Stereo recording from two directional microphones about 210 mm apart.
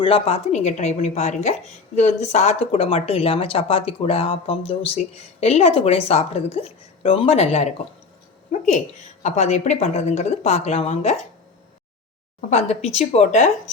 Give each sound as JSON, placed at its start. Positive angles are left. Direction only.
{"t": 0.0, "sound": "speech", "side_deg": 25}
{"t": 8.5, "sound": "a sound", "side_deg": 35}
{"t": 9.2, "sound": "speech", "side_deg": 35}
{"t": 12.5, "sound": "speech", "side_deg": 30}